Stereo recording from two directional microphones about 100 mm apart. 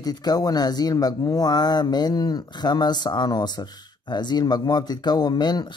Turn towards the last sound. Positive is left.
turn(degrees=45)  # may be behind; listen again after turning